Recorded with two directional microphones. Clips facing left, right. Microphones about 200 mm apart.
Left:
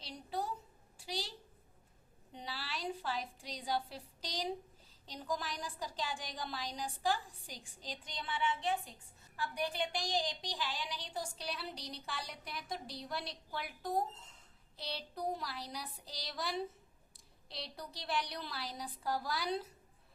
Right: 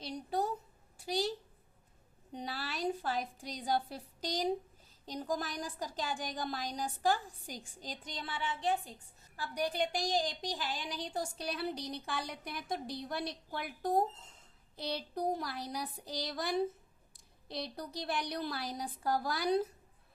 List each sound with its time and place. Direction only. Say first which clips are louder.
0.0 s a woman's voice: right 6 dB; 50° right (ahead or behind)
2.3 s a woman's voice: right 5 dB; 50° right (ahead or behind)